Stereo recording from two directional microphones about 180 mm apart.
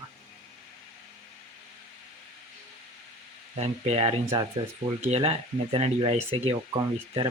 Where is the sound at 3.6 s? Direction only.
35° right (ahead or behind).